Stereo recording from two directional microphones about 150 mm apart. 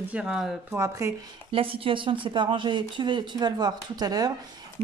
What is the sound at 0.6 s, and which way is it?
Speech, 20° right (ahead or behind).